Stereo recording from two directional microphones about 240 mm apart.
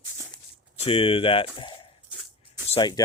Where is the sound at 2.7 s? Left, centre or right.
Centre.